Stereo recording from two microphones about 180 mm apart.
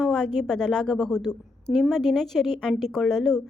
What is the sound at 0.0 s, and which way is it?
A woman's voice, 5° left (ahead or behind).